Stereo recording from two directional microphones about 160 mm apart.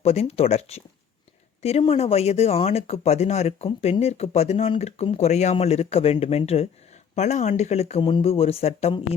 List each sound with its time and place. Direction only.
0.0 s speech: 40° left (ahead or behind)